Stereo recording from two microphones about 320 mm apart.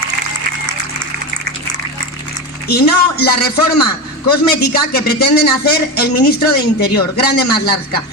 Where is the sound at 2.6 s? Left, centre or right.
Left.